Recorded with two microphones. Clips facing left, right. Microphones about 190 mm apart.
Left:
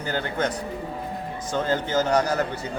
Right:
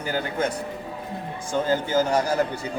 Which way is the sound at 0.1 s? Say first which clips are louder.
Even; 10° right (ahead or behind).